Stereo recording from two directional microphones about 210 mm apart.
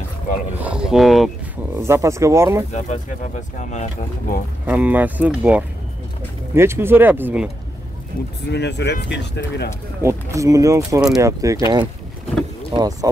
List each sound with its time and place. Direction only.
0.6 s speech: 5° right (ahead or behind)
1.8 s speech: 15° right (ahead or behind)
2.7 s speech: 35° left (ahead or behind)
4.6 s speech: 5° right (ahead or behind)
8.5 s speech: 55° left (ahead or behind)
10.0 s speech: 15° right (ahead or behind)